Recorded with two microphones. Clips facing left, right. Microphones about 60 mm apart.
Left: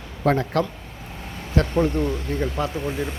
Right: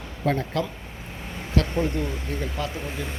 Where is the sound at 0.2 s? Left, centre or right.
Left.